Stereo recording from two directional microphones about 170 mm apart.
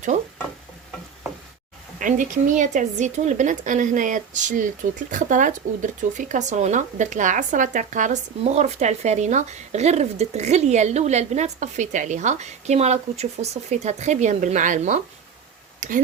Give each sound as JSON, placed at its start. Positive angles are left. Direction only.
{"t": 2.0, "sound": "speech", "side_deg": -50}